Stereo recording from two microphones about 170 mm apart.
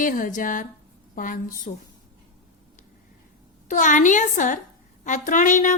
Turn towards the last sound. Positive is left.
turn(degrees=45)  # may be behind; listen again after turning